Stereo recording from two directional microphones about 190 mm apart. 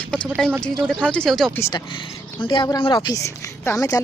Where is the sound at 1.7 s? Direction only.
25° left (ahead or behind).